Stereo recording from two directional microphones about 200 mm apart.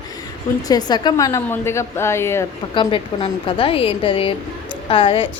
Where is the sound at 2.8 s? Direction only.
25° left (ahead or behind).